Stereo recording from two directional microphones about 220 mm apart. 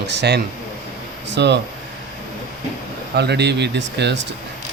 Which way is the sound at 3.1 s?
50° right (ahead or behind).